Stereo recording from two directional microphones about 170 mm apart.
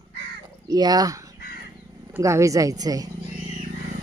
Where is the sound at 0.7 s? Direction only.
20° right (ahead or behind).